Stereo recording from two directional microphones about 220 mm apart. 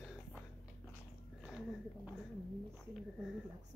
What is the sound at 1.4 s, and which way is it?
Speech, 5° right (ahead or behind).